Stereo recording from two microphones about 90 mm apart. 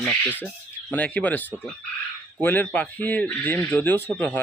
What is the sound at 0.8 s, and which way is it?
Speech, 15° left (ahead or behind).